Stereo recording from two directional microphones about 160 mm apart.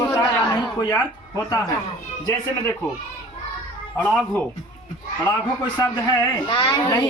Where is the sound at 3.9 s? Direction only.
5° left (ahead or behind).